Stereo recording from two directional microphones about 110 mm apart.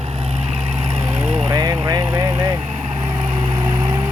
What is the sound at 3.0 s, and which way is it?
Vehicle, 45° right (ahead or behind).